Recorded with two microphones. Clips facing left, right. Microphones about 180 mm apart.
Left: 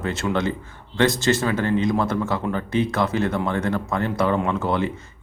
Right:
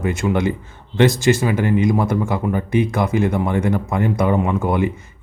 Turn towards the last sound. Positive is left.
turn(degrees=-15)  # may be behind; listen again after turning